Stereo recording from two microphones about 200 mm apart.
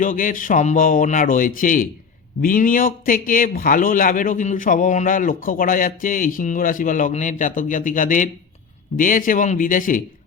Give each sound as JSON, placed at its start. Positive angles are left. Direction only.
{"t": 0.0, "sound": "a man's voice", "side_deg": 40}